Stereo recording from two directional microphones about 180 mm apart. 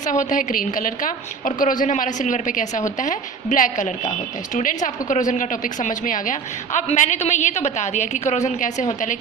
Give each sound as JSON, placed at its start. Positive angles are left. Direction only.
{"t": 0.0, "sound": "a woman's voice", "side_deg": 45}